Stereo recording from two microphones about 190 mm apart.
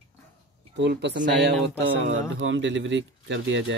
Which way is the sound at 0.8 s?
65° right (ahead or behind).